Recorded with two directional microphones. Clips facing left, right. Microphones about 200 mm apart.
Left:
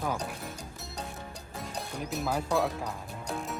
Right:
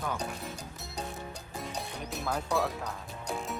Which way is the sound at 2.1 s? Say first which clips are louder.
Left 2 dB; 5° left (ahead or behind).